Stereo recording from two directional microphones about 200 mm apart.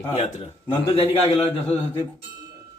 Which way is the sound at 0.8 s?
30° left (ahead or behind).